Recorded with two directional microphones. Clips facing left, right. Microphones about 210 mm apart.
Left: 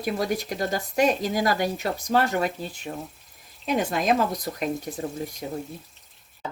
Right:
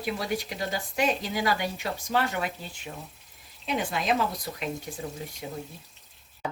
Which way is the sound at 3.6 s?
45° left (ahead or behind).